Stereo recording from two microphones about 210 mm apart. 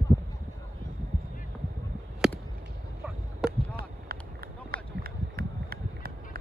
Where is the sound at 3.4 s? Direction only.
5° right (ahead or behind).